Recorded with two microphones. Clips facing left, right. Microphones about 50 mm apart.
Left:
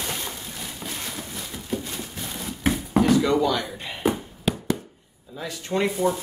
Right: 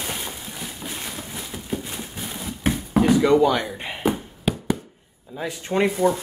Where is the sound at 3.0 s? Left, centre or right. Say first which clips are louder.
Right 4 dB; centre.